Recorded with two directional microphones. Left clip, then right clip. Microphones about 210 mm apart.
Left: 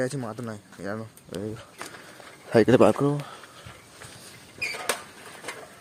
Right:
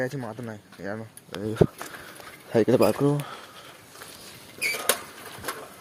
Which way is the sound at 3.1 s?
15° right (ahead or behind).